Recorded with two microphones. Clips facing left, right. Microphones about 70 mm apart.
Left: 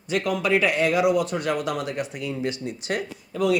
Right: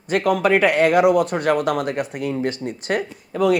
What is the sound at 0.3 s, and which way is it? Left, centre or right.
Speech, right.